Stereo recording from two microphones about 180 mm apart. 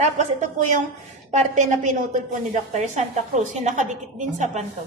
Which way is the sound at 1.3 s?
45° right (ahead or behind).